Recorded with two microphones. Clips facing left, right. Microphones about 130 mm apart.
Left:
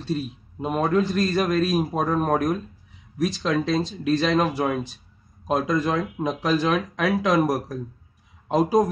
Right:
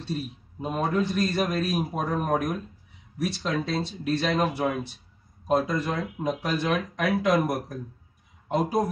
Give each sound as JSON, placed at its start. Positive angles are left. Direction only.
{"t": 0.0, "sound": "a man's voice", "side_deg": 90}